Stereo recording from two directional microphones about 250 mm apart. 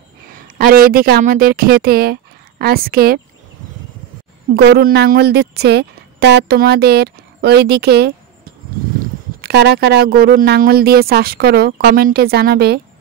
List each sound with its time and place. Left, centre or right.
0.6 s speech: right
4.6 s speech: right
9.4 s speech: right